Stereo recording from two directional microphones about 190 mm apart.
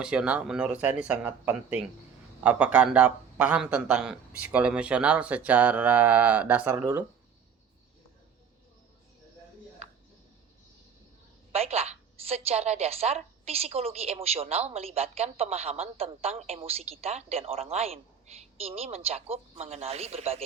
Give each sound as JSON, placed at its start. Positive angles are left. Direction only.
{"t": 0.0, "sound": "a man's voice", "side_deg": -5}
{"t": 11.5, "sound": "a woman's voice", "side_deg": -30}